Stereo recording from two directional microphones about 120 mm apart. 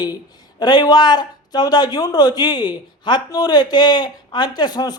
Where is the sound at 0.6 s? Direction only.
35° left (ahead or behind).